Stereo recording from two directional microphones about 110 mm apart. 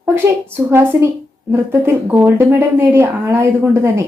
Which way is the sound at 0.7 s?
25° right (ahead or behind).